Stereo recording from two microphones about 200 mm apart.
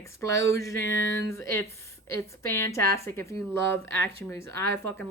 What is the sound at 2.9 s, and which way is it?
A woman's voice, 15° left (ahead or behind).